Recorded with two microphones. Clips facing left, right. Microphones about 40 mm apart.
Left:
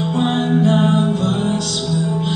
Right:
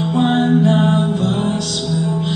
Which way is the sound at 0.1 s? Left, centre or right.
Centre.